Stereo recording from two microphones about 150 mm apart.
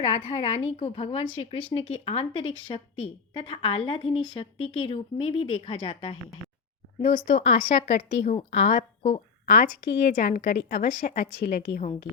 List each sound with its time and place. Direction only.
0.0 s a woman's voice: 50° left (ahead or behind)
9.8 s a woman's voice: 90° left